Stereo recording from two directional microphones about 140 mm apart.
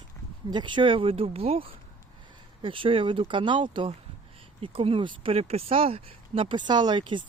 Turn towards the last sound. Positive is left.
turn(degrees=-35)  # may be behind; listen again after turning